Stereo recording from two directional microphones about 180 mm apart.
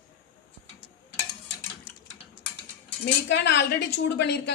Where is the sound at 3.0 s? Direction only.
70° left (ahead or behind).